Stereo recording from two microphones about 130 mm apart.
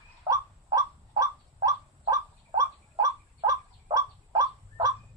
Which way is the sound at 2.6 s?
25° right (ahead or behind).